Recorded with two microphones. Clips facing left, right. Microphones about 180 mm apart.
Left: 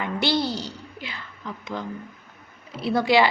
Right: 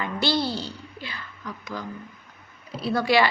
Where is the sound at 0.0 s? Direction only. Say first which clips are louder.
Left 1 dB; 20° left (ahead or behind).